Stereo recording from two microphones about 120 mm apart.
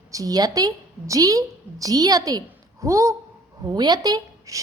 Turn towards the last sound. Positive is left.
turn(degrees=-30)  # may be behind; listen again after turning